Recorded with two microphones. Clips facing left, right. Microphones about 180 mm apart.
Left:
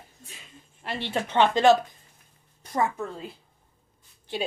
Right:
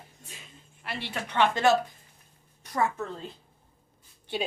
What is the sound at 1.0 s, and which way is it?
Speech, 25° left (ahead or behind).